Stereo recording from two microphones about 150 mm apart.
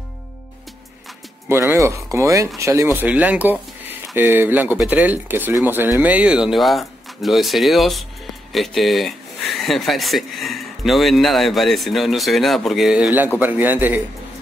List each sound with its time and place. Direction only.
1.5 s speech: 15° right (ahead or behind)